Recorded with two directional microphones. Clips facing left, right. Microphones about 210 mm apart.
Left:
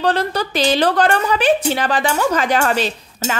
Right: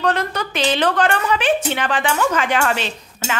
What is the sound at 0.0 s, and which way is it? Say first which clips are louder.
A woman's voice: left 2 dB; 35° left (ahead or behind).